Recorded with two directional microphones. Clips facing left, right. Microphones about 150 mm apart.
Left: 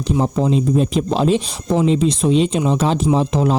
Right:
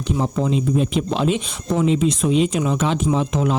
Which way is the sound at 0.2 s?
35° left (ahead or behind).